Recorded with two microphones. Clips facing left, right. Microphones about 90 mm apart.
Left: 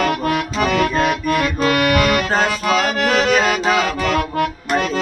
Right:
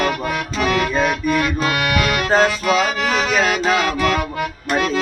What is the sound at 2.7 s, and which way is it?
Music, 60° left (ahead or behind).